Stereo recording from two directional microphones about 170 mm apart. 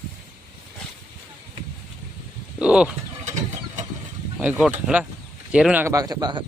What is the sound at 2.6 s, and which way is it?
Speech, 5° right (ahead or behind).